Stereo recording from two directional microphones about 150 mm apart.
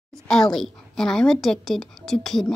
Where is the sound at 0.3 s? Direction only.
Centre (ahead or behind).